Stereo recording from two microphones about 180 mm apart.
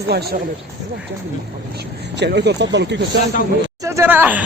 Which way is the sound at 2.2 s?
70° right (ahead or behind).